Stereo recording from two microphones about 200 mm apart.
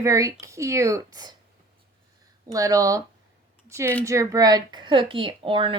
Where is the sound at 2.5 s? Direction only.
15° right (ahead or behind).